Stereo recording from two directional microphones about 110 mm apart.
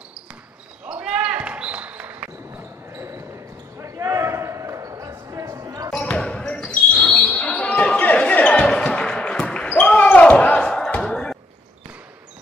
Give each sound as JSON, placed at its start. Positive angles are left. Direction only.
{"t": 0.8, "sound": "basketball bounce", "side_deg": -10}
{"t": 2.9, "sound": "basketball bounce", "side_deg": -25}
{"t": 5.9, "sound": "basketball bounce", "side_deg": 5}